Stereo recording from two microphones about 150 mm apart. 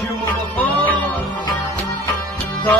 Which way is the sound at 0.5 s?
10° left (ahead or behind).